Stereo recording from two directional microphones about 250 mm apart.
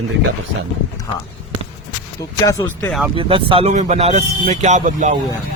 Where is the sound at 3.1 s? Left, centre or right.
Right.